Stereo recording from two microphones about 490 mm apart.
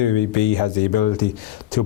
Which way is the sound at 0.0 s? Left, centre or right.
Left.